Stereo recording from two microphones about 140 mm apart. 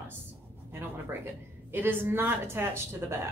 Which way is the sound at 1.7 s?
15° right (ahead or behind).